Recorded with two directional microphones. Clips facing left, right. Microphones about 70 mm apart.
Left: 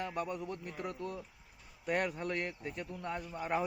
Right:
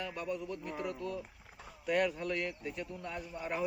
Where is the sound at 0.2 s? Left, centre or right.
Left.